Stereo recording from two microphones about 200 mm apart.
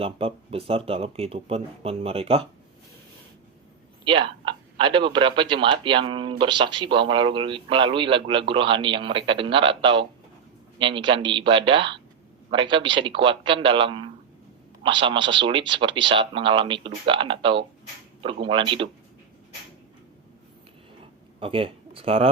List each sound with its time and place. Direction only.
0.0 s speech: 30° right (ahead or behind)
4.0 s speech: 25° right (ahead or behind)
21.4 s speech: 25° right (ahead or behind)